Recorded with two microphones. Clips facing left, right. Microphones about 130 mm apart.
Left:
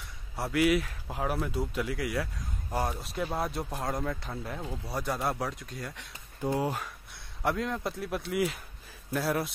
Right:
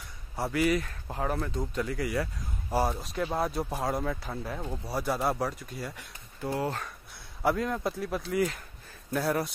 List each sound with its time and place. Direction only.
0.4 s speech: centre (ahead or behind)
6.4 s speech: 15° left (ahead or behind)
7.4 s speech: centre (ahead or behind)